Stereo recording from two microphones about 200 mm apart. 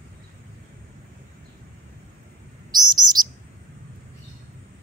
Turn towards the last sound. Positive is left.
turn(degrees=-20)  # may be behind; listen again after turning